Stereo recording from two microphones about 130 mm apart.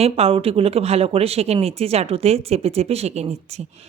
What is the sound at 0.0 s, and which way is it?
Speech, 50° right (ahead or behind).